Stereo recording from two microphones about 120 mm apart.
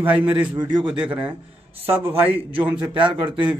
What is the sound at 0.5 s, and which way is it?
Speech, 40° right (ahead or behind).